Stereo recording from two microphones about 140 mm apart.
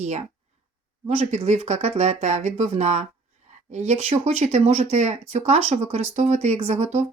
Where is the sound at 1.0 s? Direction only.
55° right (ahead or behind).